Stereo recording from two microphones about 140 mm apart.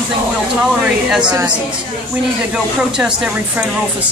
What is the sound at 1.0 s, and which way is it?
Speech, 5° right (ahead or behind).